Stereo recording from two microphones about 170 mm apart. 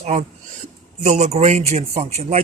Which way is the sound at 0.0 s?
45° right (ahead or behind).